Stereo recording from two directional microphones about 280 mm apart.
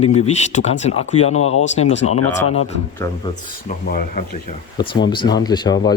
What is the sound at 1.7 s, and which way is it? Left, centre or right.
Speech, left.